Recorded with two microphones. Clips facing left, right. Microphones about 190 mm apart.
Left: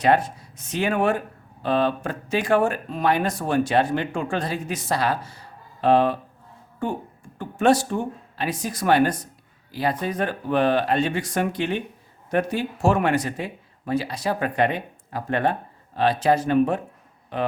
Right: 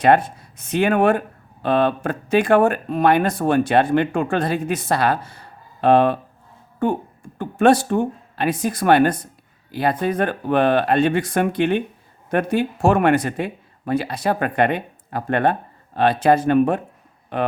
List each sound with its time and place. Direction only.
0.0 s speech: 55° right (ahead or behind)